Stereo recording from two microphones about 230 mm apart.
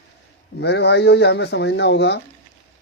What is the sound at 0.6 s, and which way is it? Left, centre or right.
Speech, left.